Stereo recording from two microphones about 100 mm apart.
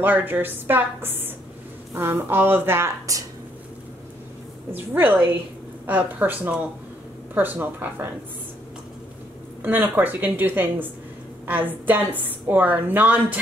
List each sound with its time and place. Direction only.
0.0 s a woman's voice: 20° right (ahead or behind)
4.7 s a woman's voice: 20° right (ahead or behind)
9.6 s a woman's voice: 20° right (ahead or behind)